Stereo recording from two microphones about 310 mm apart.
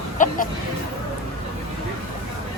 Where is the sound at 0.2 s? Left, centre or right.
Left.